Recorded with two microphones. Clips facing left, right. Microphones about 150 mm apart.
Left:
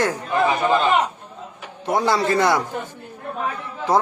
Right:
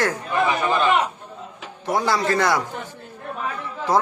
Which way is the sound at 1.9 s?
25° left (ahead or behind).